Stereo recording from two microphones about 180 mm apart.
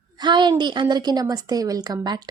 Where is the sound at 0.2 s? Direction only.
25° right (ahead or behind).